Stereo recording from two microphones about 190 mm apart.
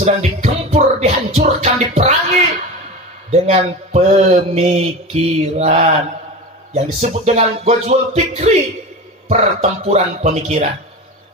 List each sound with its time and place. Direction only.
0.0 s music: 35° right (ahead or behind)
3.3 s mantra: 35° right (ahead or behind)